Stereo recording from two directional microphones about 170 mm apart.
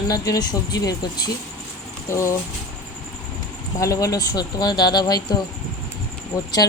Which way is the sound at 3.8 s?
20° left (ahead or behind).